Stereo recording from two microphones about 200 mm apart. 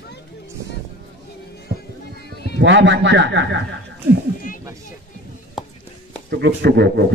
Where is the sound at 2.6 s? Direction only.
65° right (ahead or behind).